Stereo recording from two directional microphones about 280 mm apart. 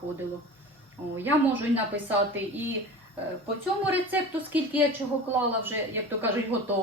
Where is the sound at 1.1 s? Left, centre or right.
Centre.